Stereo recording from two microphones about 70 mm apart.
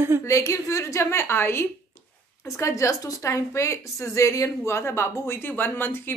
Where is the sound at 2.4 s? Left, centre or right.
Left.